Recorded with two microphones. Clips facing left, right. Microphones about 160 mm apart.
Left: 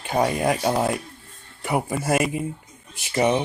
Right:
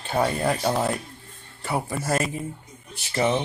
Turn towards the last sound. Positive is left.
turn(degrees=15)  # may be behind; listen again after turning